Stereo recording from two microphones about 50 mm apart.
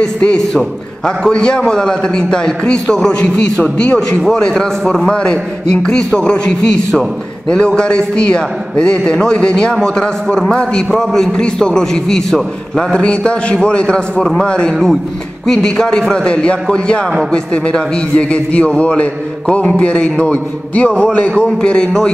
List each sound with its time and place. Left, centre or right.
0.0 s a man's voice: left
14.7 s a man's voice: centre; by 21.5 s left
21.5 s a man's voice: centre